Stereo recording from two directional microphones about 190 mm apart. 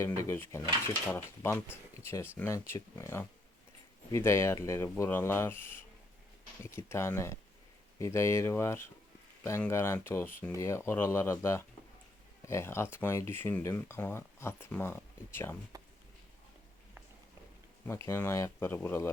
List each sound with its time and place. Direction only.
0.0 s speech: 15° left (ahead or behind)
15.7 s a sound: 20° right (ahead or behind)
17.8 s speech: 15° left (ahead or behind)